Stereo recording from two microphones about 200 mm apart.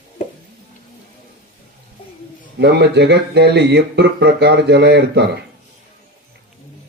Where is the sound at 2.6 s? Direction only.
55° right (ahead or behind).